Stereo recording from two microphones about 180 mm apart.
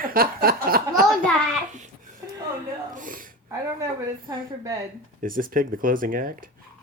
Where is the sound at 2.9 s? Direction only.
50° right (ahead or behind).